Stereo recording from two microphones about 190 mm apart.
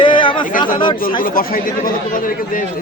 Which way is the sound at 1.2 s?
50° left (ahead or behind).